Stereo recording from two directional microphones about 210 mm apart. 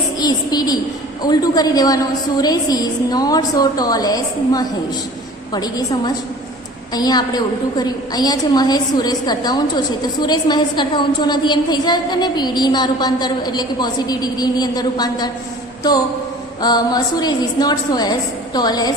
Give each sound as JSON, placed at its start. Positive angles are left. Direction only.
{"t": 0.2, "sound": "a woman's voice", "side_deg": 20}
{"t": 16.6, "sound": "a woman's voice", "side_deg": 20}